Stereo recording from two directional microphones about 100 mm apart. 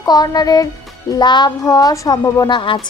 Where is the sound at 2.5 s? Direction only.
55° left (ahead or behind).